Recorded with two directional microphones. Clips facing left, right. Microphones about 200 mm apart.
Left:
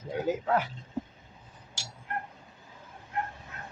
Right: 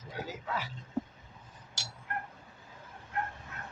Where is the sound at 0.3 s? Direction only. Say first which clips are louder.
Left 13 dB; 55° left (ahead or behind).